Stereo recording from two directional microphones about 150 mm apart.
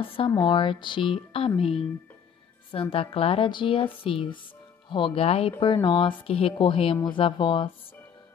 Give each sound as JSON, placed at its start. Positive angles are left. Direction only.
{"t": 0.0, "sound": "speech", "side_deg": 35}